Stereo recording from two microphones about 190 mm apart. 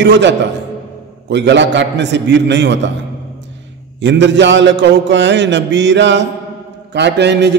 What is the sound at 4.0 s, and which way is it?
A man's voice, 70° right (ahead or behind).